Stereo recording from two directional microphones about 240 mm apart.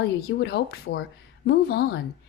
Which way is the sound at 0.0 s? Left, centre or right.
Left.